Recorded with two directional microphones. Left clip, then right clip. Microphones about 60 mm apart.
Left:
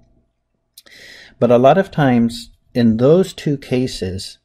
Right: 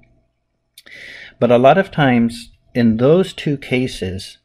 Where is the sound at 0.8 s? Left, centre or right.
Left.